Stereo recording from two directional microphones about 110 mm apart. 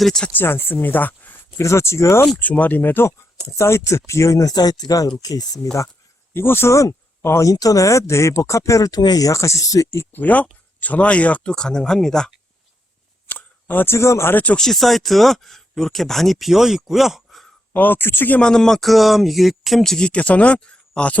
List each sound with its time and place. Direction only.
0.0 s speech: 5° left (ahead or behind)
0.3 s speech: 20° left (ahead or behind)
2.4 s speech: 15° left (ahead or behind); by 5.5 s 35° left (ahead or behind)
6.3 s speech: 20° left (ahead or behind); by 12.3 s 5° left (ahead or behind)
13.2 s speech: 15° left (ahead or behind); by 17.4 s centre (ahead or behind)
17.7 s speech: 15° left (ahead or behind)